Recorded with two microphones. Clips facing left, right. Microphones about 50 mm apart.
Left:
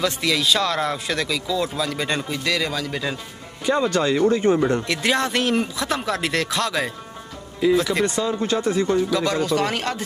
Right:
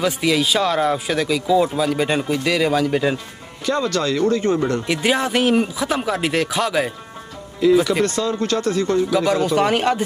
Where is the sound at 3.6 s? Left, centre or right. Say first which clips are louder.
Even; left.